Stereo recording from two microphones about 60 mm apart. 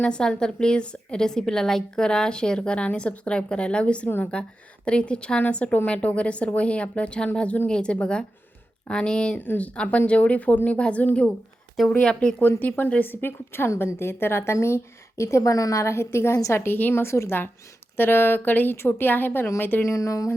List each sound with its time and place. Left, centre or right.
0.0 s a woman's voice: centre
11.8 s a woman's voice: centre
12.4 s a woman's voice: left
19.8 s speech: left